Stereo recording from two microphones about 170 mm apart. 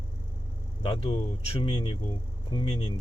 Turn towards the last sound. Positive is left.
turn(degrees=30)  # may be behind; listen again after turning